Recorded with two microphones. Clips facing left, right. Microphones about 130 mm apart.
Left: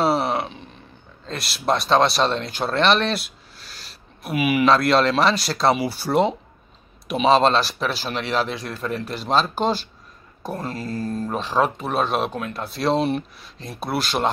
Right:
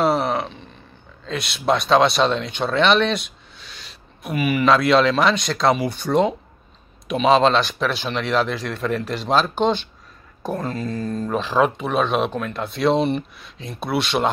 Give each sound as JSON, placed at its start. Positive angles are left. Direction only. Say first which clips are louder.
{"t": 0.0, "sound": "a sound", "louder": "right 1 dB", "side_deg": 5}
{"t": 1.2, "sound": "speech", "louder": "right 3 dB", "side_deg": 0}
{"t": 10.8, "sound": "speech", "louder": "right 1 dB", "side_deg": 35}
{"t": 11.3, "sound": "speech", "louder": "right 3 dB", "side_deg": 0}